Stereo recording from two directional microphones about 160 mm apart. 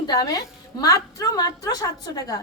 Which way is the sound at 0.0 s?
25° left (ahead or behind).